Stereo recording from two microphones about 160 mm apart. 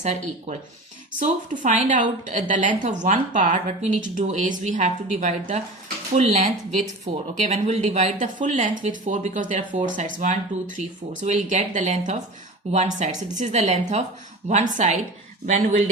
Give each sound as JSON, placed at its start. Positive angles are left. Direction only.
{"t": 0.0, "sound": "speech", "side_deg": -50}